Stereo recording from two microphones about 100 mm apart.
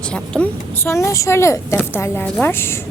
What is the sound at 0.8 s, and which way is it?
A woman's voice, 30° left (ahead or behind).